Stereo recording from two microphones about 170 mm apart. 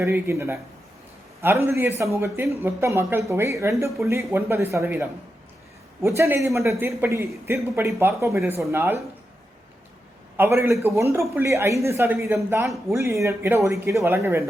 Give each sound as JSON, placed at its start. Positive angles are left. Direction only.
{"t": 0.0, "sound": "speech", "side_deg": -15}
{"t": 10.3, "sound": "speech", "side_deg": -15}